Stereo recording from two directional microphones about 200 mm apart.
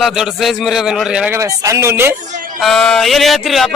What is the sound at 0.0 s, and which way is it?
A man's voice, centre (ahead or behind).